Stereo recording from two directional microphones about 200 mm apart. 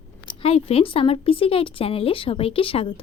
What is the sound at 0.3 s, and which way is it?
Speech, 30° left (ahead or behind).